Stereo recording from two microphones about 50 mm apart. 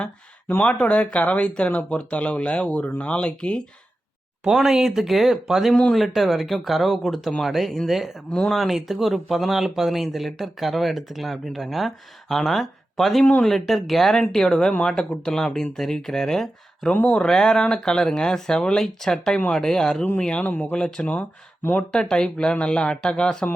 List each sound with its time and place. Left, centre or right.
0.6 s speech: left
4.4 s speech: centre
16.9 s speech: left
17.2 s speech: centre
20.4 s speech: left
20.7 s speech: centre
21.0 s speech: left
21.9 s speech: centre